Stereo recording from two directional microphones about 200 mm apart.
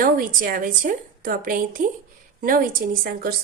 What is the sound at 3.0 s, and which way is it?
Speech, 45° right (ahead or behind).